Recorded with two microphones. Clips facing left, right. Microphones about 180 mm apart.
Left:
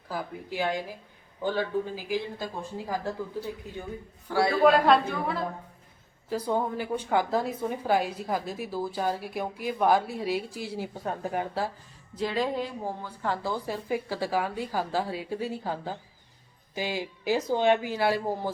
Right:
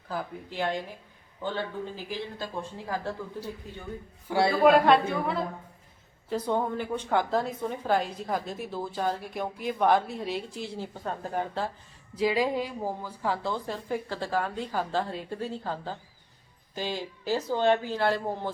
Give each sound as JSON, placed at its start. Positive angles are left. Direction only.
{"t": 0.1, "sound": "a woman's voice", "side_deg": 5}
{"t": 4.3, "sound": "a man's voice", "side_deg": -25}
{"t": 4.6, "sound": "a woman's voice", "side_deg": 0}
{"t": 12.1, "sound": "a woman's voice", "side_deg": -5}